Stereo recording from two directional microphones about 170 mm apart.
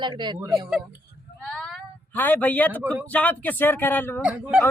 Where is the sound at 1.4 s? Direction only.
Centre (ahead or behind).